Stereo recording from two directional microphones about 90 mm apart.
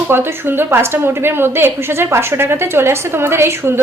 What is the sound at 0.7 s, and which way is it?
A woman's voice, 25° right (ahead or behind).